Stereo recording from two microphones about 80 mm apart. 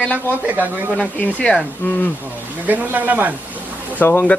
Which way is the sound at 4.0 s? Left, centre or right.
Left.